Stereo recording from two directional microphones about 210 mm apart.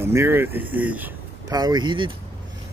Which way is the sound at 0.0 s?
10° right (ahead or behind).